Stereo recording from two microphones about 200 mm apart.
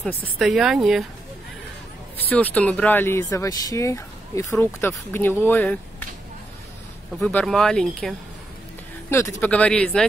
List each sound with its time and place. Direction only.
0.2 s speech: centre (ahead or behind)
2.2 s speech: 10° left (ahead or behind)
7.2 s speech: 5° left (ahead or behind)
9.4 s speech: 5° left (ahead or behind)